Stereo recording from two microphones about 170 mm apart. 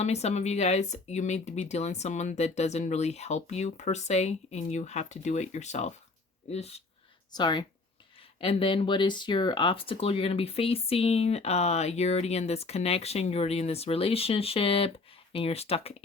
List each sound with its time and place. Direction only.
0.0 s speech: 40° left (ahead or behind)
7.3 s speech: 25° left (ahead or behind)